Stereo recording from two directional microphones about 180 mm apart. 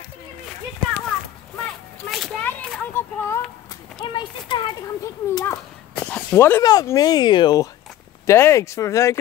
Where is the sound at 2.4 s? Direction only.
10° left (ahead or behind).